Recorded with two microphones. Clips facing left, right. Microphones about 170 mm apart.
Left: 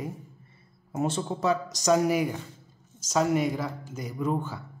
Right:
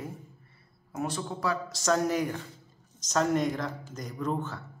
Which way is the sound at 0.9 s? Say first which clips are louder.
Left 4 dB; 25° left (ahead or behind).